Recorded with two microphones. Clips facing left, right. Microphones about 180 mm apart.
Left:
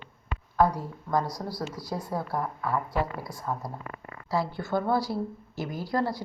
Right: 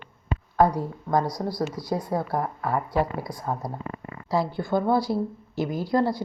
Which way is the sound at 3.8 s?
25° right (ahead or behind).